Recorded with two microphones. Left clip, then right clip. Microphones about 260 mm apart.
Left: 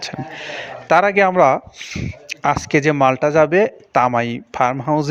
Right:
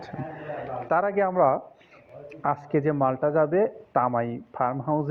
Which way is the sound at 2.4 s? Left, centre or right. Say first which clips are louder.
Left 9 dB; left.